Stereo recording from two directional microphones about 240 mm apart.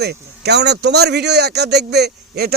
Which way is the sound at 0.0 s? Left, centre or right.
Right.